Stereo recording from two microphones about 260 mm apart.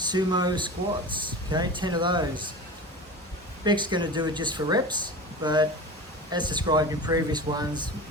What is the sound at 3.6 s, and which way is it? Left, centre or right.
Speech, centre.